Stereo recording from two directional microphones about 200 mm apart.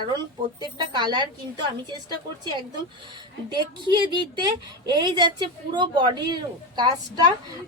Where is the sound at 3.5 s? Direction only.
20° right (ahead or behind).